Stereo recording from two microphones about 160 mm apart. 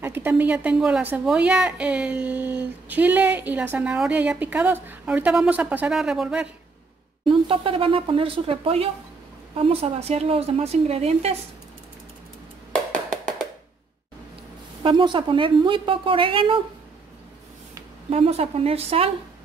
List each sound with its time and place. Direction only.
0.0 s a woman's voice: 10° right (ahead or behind)
7.2 s a woman's voice: 35° right (ahead or behind)
14.8 s a woman's voice: 30° right (ahead or behind)
18.1 s a woman's voice: 40° right (ahead or behind)